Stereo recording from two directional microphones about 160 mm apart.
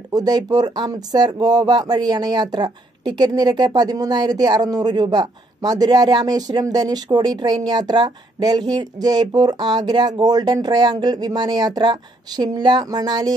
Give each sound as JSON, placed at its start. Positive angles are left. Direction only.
{"t": 0.1, "sound": "speech", "side_deg": -25}